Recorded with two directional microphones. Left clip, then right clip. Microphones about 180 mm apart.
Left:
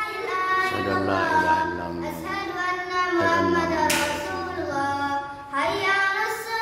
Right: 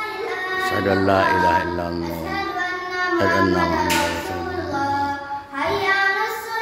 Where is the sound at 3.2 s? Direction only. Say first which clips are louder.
Right 4 dB; 15° right (ahead or behind).